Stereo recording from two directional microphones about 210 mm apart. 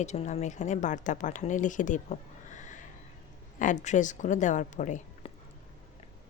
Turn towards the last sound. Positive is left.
turn(degrees=35)  # may be behind; listen again after turning